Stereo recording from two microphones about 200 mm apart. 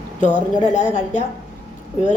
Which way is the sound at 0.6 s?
35° left (ahead or behind).